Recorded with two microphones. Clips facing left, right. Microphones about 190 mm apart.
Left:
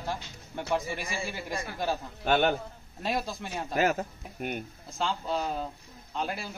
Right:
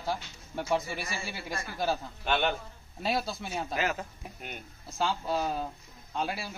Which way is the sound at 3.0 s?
5° right (ahead or behind).